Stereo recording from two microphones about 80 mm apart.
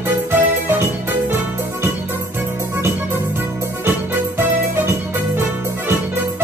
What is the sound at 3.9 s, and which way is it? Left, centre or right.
Music, right.